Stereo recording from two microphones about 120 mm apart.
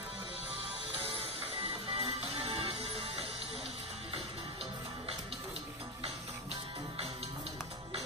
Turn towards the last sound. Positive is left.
turn(degrees=-55)  # may be behind; listen again after turning